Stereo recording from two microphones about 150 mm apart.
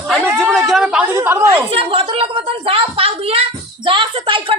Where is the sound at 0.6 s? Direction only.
5° right (ahead or behind).